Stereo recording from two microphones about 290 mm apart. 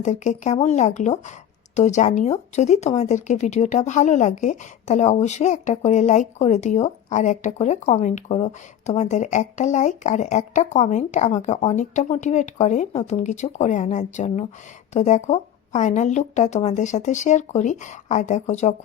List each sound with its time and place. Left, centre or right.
0.0 s speech: left